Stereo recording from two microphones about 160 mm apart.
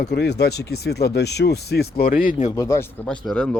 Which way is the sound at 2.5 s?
20° left (ahead or behind).